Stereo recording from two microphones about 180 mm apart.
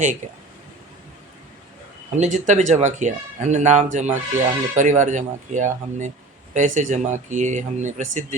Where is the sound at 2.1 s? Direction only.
40° right (ahead or behind).